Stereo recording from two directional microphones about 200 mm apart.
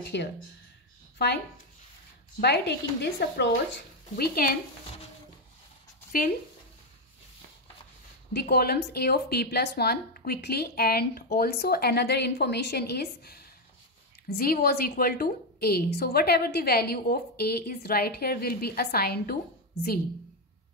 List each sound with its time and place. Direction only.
0.1 s a woman's voice: 60° left (ahead or behind)
2.4 s a woman's voice: 55° left (ahead or behind)
8.3 s a woman's voice: 55° left (ahead or behind)